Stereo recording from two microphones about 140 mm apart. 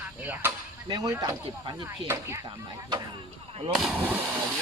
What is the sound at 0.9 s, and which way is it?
Speech, 25° right (ahead or behind).